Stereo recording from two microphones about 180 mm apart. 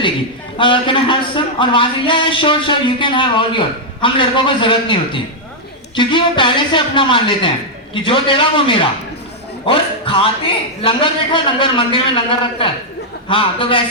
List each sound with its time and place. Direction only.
0.6 s a man's voice: 25° left (ahead or behind)